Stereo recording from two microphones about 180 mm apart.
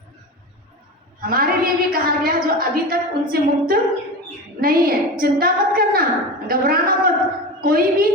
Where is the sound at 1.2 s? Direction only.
55° right (ahead or behind).